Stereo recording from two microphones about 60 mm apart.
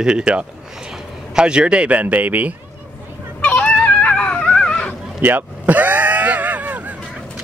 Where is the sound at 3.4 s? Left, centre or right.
Left.